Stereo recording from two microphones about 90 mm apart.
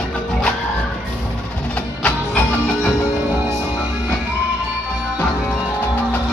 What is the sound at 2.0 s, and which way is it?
Music, 15° left (ahead or behind).